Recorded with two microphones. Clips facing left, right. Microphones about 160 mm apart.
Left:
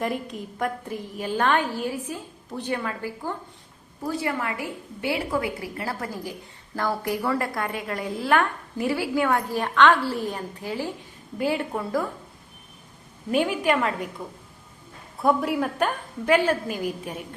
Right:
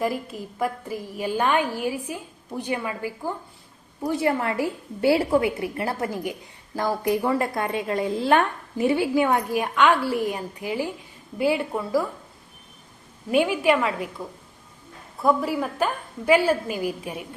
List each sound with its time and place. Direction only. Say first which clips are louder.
0.0 s a woman's voice: right 2 dB; 5° right (ahead or behind)
4.2 s a woman's voice: right 8 dB; 30° right (ahead or behind); by 12.0 s 5° right (ahead or behind)
13.4 s a woman's voice: right 2 dB; 5° right (ahead or behind)
15.2 s a woman's voice: even; centre (ahead or behind)